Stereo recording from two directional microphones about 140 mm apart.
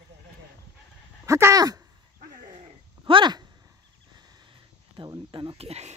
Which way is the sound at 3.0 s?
35° right (ahead or behind).